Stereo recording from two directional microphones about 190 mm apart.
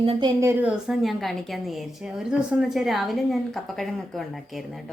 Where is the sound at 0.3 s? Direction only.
15° right (ahead or behind).